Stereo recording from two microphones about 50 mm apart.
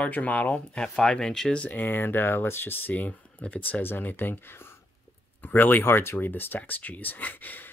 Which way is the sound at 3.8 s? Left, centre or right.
Left.